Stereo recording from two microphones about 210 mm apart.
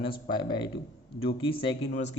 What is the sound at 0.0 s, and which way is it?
Speech, 25° left (ahead or behind).